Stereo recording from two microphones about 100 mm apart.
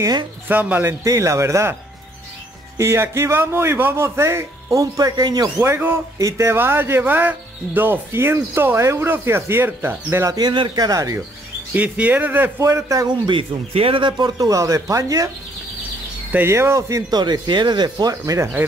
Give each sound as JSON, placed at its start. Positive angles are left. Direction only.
{"t": 0.5, "sound": "speech", "side_deg": -15}
{"t": 0.8, "sound": "a man's voice", "side_deg": -30}
{"t": 2.8, "sound": "a man's voice", "side_deg": -25}
{"t": 5.6, "sound": "a man's voice", "side_deg": -20}
{"t": 10.3, "sound": "a man's voice", "side_deg": -50}
{"t": 11.7, "sound": "speech", "side_deg": -15}
{"t": 12.5, "sound": "a man's voice", "side_deg": -30}
{"t": 16.4, "sound": "a man's voice", "side_deg": -25}
{"t": 17.1, "sound": "speech", "side_deg": -45}